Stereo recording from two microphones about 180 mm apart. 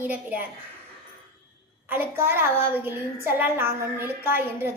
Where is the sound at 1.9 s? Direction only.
10° right (ahead or behind).